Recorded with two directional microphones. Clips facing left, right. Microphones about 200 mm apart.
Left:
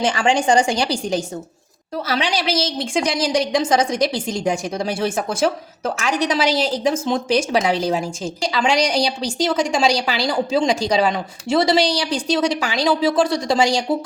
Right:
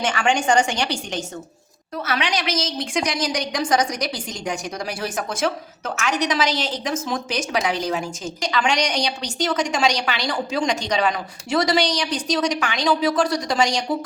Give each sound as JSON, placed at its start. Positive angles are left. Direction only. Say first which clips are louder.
{"t": 0.0, "sound": "a woman's voice", "louder": "left 3 dB", "side_deg": 35}